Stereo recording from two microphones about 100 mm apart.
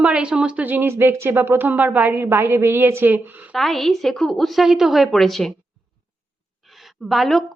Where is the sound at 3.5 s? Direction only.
Centre (ahead or behind).